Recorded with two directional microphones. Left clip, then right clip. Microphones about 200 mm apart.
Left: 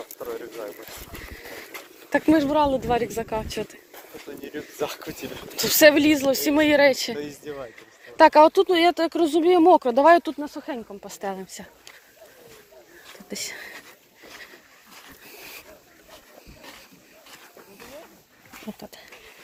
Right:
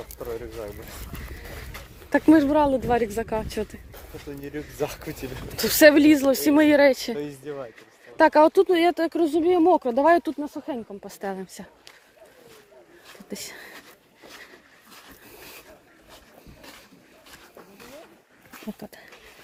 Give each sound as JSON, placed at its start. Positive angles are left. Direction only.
{"t": 0.2, "sound": "a sound", "side_deg": -40}
{"t": 2.0, "sound": "speech", "side_deg": -35}
{"t": 4.8, "sound": "speech", "side_deg": -65}
{"t": 5.1, "sound": "speech", "side_deg": -40}
{"t": 7.2, "sound": "speech", "side_deg": -50}
{"t": 8.1, "sound": "speech", "side_deg": -20}
{"t": 9.2, "sound": "speech", "side_deg": -5}
{"t": 11.0, "sound": "speech", "side_deg": -30}
{"t": 13.3, "sound": "speech", "side_deg": -20}
{"t": 18.8, "sound": "speech", "side_deg": -25}